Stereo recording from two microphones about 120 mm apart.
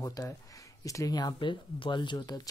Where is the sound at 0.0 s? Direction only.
25° left (ahead or behind).